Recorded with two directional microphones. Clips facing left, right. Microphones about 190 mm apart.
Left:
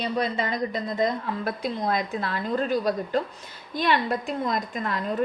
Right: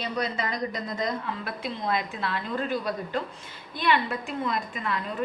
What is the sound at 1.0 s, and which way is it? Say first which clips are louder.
A woman's voice: left 5 dB; 40° left (ahead or behind).